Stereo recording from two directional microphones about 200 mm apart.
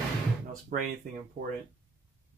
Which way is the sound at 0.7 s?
45° right (ahead or behind).